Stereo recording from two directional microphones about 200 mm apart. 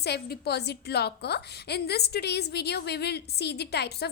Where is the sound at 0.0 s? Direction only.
55° left (ahead or behind).